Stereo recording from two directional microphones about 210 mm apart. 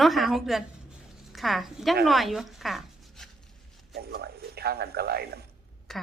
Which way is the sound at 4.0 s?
50° right (ahead or behind).